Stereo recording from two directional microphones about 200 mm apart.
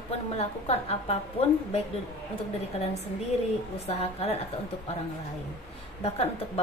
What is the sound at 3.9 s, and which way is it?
Speech, 30° left (ahead or behind).